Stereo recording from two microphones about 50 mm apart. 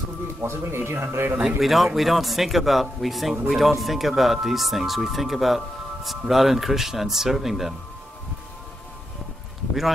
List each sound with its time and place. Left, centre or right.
0.4 s speech: right
1.6 s speech: centre